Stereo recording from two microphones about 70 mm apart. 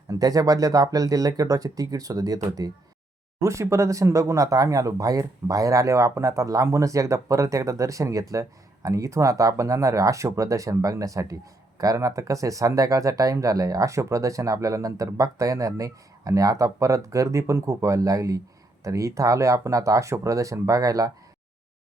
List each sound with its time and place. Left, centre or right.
0.1 s speech: right
3.4 s speech: right